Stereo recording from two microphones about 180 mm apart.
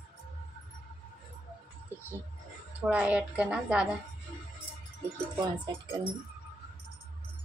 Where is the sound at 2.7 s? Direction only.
5° right (ahead or behind).